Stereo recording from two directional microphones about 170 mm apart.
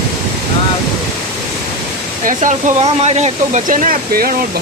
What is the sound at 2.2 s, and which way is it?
Speech, 50° right (ahead or behind).